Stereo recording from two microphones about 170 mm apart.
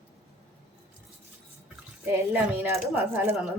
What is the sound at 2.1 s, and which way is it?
A woman's voice, 15° right (ahead or behind).